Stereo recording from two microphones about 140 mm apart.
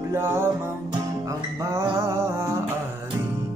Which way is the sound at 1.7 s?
20° right (ahead or behind).